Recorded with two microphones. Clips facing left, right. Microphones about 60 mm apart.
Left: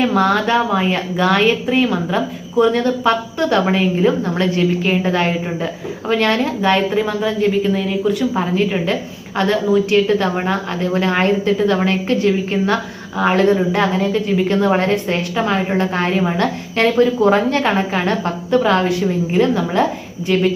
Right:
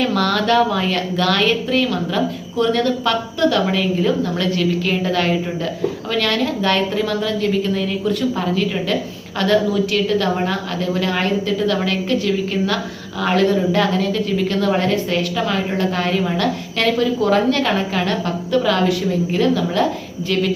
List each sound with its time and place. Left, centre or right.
0.0 s a woman's voice: centre
8.5 s a woman's voice: left